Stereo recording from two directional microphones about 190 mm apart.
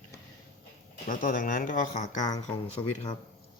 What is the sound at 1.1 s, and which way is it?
Speech, 45° left (ahead or behind).